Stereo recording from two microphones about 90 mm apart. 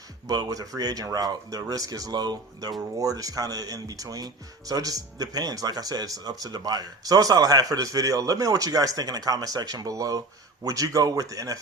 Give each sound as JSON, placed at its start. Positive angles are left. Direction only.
{"t": 0.3, "sound": "speech", "side_deg": -45}